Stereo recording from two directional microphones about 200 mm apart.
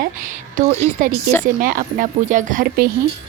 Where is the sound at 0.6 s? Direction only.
40° right (ahead or behind).